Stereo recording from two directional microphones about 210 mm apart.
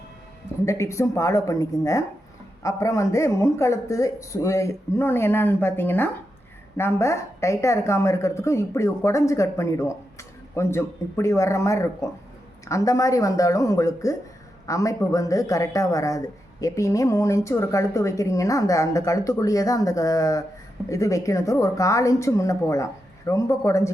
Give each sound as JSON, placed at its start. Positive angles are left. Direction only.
{"t": 0.6, "sound": "speech", "side_deg": 15}